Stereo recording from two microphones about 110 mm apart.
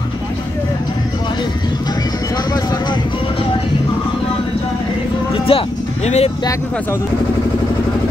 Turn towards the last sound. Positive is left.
turn(degrees=90)